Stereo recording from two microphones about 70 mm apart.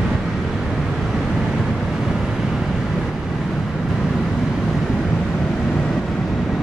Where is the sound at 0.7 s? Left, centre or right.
Centre.